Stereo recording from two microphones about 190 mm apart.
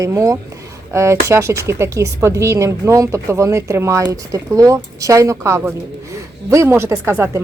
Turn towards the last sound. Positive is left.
turn(degrees=-15)  # may be behind; listen again after turning